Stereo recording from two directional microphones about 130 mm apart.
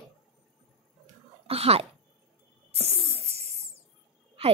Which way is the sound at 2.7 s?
50° right (ahead or behind).